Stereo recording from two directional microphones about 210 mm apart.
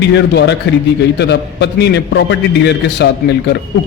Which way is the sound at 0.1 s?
55° left (ahead or behind).